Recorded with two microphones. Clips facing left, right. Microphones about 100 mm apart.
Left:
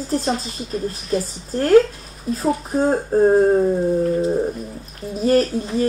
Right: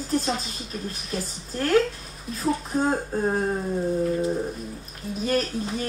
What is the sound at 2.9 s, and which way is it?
Speech, 35° left (ahead or behind).